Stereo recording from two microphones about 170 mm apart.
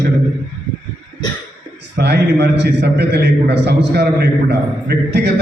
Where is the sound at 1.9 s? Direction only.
70° right (ahead or behind).